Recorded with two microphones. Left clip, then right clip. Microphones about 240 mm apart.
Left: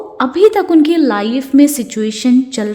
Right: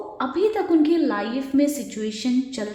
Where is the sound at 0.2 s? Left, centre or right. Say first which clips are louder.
Left 12 dB; left.